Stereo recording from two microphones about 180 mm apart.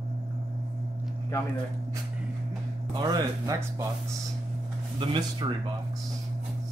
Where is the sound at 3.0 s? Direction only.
20° right (ahead or behind).